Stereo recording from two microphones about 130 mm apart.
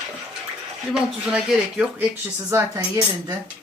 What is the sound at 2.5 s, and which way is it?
Speech, 25° right (ahead or behind).